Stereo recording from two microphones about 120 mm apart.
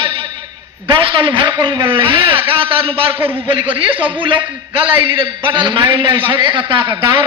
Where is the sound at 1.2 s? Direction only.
45° right (ahead or behind).